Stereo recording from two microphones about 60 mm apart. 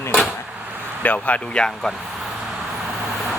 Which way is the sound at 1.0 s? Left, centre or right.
Left.